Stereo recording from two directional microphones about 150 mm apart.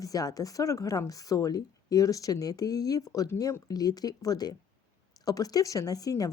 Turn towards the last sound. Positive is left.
turn(degrees=25)  # may be behind; listen again after turning